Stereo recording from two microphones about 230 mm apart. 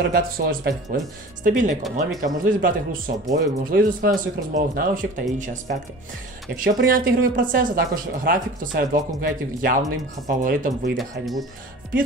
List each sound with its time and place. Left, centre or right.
0.1 s speech: right
1.8 s speech: centre
2.2 s speech: right
6.5 s speech: right
11.0 s speech: centre